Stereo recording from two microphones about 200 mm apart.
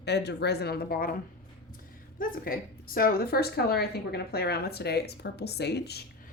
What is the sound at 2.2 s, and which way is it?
A woman's voice, 45° left (ahead or behind).